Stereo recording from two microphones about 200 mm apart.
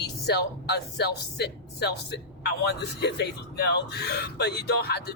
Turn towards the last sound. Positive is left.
turn(degrees=55)  # may be behind; listen again after turning